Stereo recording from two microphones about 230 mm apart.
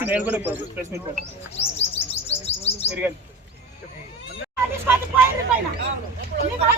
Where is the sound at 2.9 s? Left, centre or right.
Centre.